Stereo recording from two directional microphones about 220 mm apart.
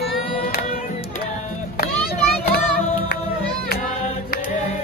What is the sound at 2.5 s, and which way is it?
Music, 45° left (ahead or behind).